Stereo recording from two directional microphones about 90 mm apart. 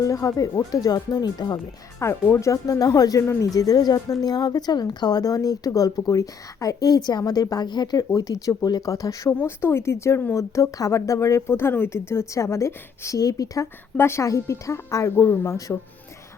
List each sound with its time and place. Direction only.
0.0 s speech: 40° left (ahead or behind)
2.0 s speech: 30° left (ahead or behind)
13.9 s speech: 25° left (ahead or behind)